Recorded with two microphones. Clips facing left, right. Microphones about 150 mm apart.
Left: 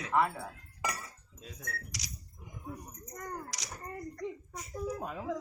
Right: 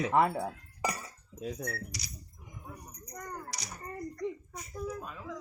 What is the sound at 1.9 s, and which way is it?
Speech, 90° left.